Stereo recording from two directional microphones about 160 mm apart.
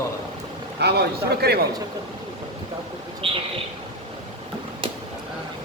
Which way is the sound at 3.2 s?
35° right (ahead or behind).